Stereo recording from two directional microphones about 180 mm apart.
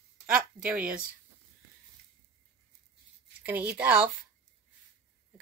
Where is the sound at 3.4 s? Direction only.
10° right (ahead or behind).